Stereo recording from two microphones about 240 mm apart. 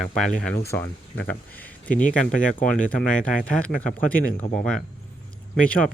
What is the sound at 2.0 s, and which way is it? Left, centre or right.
Speech, left.